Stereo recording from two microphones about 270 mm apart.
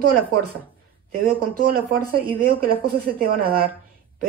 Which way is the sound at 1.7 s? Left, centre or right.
Right.